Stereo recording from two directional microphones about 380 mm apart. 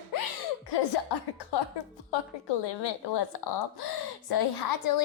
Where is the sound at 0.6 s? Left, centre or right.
Left.